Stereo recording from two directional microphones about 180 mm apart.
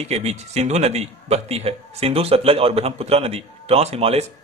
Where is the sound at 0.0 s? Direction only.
35° right (ahead or behind).